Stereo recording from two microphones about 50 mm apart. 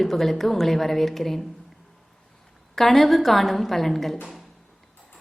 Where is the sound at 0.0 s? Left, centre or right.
Centre.